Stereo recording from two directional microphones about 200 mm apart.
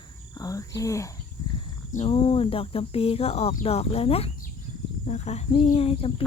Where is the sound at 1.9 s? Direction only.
30° left (ahead or behind).